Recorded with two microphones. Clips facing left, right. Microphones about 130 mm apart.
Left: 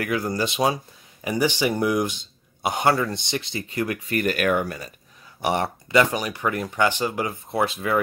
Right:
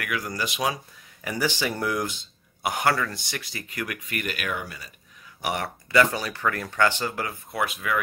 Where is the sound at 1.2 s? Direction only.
20° left (ahead or behind); by 4.9 s 50° left (ahead or behind).